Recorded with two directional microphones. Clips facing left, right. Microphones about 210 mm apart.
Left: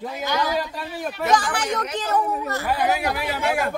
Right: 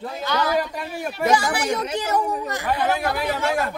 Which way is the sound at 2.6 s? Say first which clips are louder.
Even; 10° left (ahead or behind).